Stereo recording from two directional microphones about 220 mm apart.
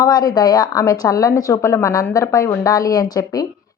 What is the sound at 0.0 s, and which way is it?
Speech, 20° left (ahead or behind).